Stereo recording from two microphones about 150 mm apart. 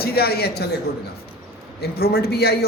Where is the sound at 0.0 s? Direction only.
90° left.